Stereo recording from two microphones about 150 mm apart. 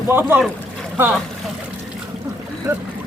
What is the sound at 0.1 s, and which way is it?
Speech, 15° right (ahead or behind).